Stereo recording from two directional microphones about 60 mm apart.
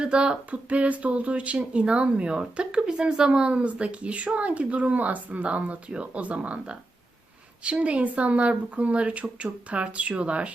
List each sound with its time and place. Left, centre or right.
0.0 s speech: centre